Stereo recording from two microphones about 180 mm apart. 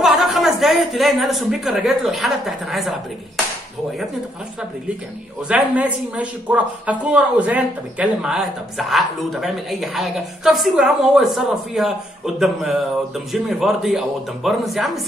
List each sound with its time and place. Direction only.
0.0 s a woman's voice: centre (ahead or behind)
5.5 s speech: 5° right (ahead or behind)
13.3 s speech: centre (ahead or behind)